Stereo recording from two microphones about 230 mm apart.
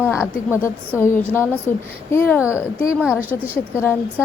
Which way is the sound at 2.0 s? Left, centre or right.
Centre.